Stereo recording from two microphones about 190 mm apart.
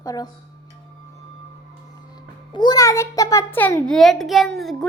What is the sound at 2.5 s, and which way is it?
A child's voice, 25° left (ahead or behind).